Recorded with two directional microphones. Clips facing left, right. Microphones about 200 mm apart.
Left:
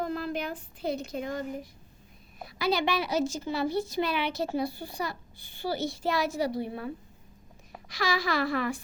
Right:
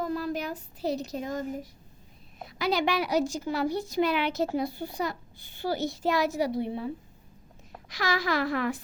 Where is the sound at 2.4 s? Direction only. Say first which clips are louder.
Right 1 dB; 15° right (ahead or behind).